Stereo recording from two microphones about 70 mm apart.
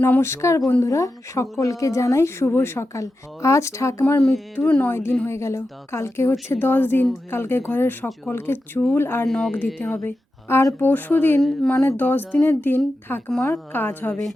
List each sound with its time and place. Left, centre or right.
0.2 s a woman's voice: left
4.3 s speech: left
5.2 s a woman's voice: left
9.2 s speech: centre
9.8 s speech: left
11.3 s speech: centre
11.7 s speech: left